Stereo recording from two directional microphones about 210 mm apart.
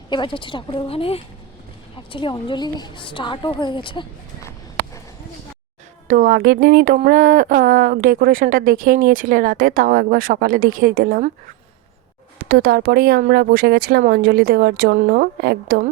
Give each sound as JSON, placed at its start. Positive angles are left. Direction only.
{"t": 0.1, "sound": "a woman's voice", "side_deg": 25}
{"t": 6.1, "sound": "speech", "side_deg": -40}